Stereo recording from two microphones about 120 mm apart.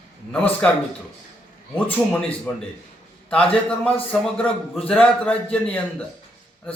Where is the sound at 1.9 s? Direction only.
10° left (ahead or behind).